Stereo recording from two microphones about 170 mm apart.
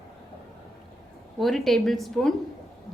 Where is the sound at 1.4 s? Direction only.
Centre (ahead or behind).